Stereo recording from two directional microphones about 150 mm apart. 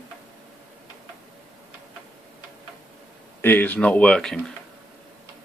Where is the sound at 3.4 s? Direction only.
15° left (ahead or behind).